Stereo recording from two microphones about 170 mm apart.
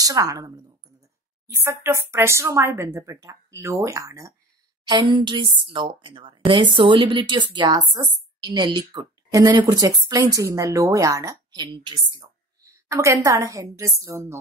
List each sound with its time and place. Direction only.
0.0 s a woman's voice: 20° right (ahead or behind)
12.7 s a woman's voice: 15° right (ahead or behind)